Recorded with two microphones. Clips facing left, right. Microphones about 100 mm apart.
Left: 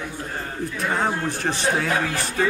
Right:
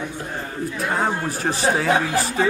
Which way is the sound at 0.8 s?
5° right (ahead or behind).